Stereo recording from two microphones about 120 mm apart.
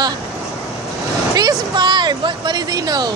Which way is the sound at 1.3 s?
30° right (ahead or behind).